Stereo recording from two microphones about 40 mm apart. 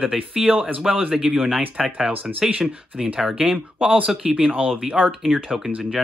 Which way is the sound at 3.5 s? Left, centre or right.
Right.